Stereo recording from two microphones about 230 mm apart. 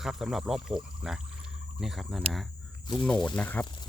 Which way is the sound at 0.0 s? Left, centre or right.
Centre.